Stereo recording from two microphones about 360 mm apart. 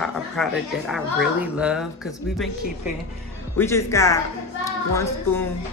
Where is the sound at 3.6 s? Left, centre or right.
Centre.